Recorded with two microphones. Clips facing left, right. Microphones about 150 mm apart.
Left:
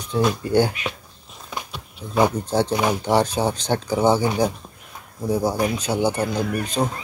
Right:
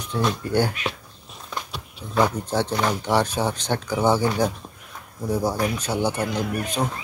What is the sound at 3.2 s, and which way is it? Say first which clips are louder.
Speech: left 2 dB; 35° left (ahead or behind).